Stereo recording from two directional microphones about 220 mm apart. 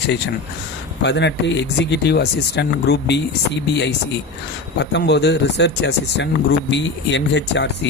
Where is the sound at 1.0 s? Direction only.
55° left (ahead or behind).